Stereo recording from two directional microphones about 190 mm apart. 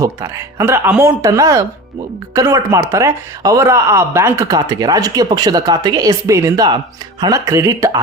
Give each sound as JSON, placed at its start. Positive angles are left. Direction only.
{"t": 0.0, "sound": "speech", "side_deg": -15}